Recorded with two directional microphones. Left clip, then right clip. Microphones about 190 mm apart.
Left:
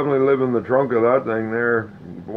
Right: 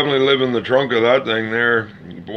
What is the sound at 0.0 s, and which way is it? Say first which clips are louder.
Speech: right 2 dB; 10° right (ahead or behind).